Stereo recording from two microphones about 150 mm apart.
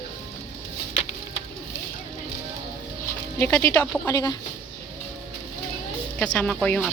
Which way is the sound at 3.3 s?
15° left (ahead or behind).